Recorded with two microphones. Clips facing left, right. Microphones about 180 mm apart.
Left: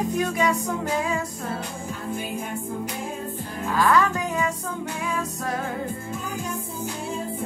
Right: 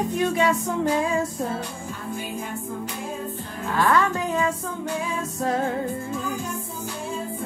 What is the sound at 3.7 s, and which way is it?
Speech, 25° right (ahead or behind).